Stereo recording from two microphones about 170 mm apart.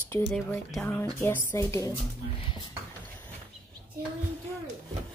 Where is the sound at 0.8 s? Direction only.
15° left (ahead or behind).